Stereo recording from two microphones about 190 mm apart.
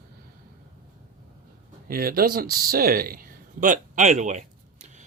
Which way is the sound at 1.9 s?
50° right (ahead or behind).